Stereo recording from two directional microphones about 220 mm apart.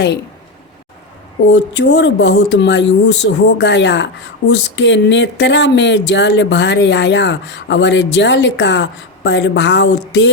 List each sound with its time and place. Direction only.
1.5 s speech: 50° left (ahead or behind)